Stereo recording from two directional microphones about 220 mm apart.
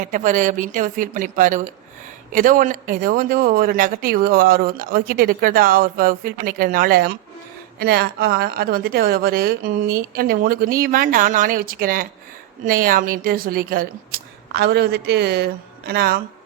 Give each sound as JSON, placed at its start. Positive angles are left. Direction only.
{"t": 0.0, "sound": "a woman's voice", "side_deg": -35}